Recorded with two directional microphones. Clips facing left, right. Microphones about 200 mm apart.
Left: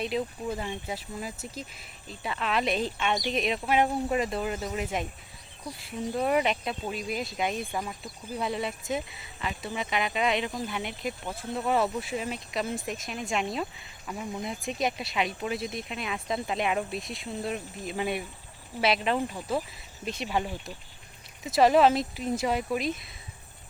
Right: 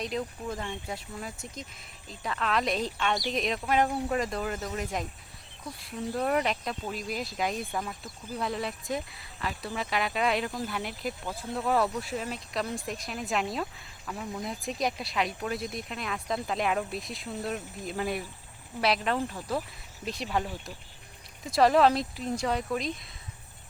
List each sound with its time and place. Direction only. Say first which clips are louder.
0.0 s speech: left 3 dB; 5° left (ahead or behind)
3.8 s speech: left 2 dB; 15° left (ahead or behind)
4.2 s speech: left 2 dB; 5° left (ahead or behind)